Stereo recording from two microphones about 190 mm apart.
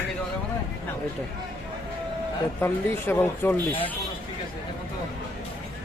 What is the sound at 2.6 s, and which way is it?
Speech, 10° left (ahead or behind).